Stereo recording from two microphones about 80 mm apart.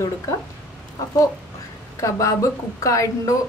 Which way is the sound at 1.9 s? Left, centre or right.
Left.